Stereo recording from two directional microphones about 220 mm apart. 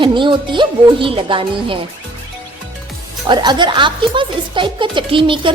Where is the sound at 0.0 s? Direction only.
20° right (ahead or behind).